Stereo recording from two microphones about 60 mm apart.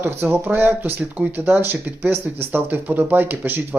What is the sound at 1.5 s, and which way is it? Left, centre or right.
Speech, right.